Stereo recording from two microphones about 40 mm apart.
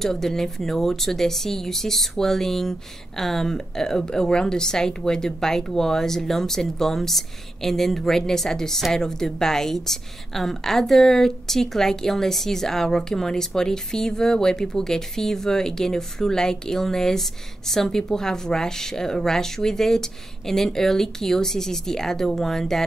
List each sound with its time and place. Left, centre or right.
0.0 s speech: centre